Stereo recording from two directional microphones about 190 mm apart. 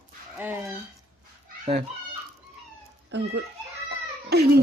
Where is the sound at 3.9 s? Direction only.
60° right (ahead or behind).